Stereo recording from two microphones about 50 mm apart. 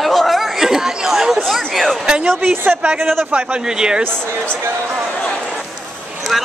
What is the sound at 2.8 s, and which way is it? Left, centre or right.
Speech, right.